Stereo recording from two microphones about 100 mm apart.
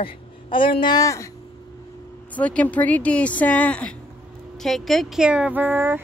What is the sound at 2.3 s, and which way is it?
Speech, 15° left (ahead or behind).